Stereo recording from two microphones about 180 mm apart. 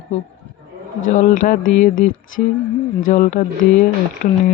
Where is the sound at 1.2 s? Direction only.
45° left (ahead or behind).